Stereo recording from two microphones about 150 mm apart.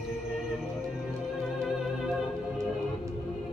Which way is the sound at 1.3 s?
Centre (ahead or behind).